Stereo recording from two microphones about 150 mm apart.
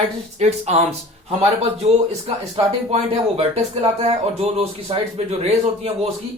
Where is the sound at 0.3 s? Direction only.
45° right (ahead or behind).